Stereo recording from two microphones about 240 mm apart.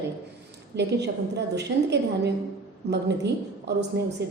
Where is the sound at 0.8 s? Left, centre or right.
Right.